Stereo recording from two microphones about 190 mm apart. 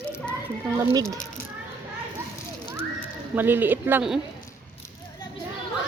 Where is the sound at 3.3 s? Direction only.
10° right (ahead or behind).